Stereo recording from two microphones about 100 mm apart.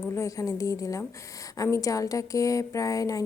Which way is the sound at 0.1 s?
30° left (ahead or behind).